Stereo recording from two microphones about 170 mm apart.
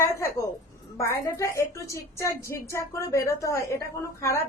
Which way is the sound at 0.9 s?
15° left (ahead or behind).